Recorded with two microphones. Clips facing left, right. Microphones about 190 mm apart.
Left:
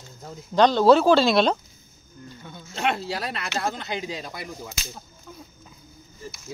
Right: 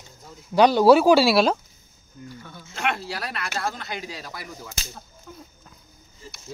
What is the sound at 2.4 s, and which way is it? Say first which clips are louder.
Speech: left 2 dB; 25° left (ahead or behind).